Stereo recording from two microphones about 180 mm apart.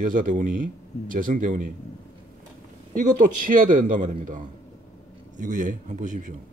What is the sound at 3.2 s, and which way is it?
Speech, 50° right (ahead or behind).